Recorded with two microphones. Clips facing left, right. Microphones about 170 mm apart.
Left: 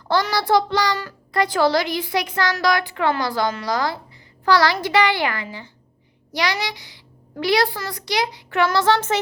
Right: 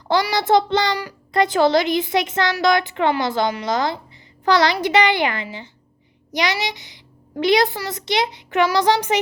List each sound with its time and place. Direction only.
0.1 s a child's voice: 15° right (ahead or behind)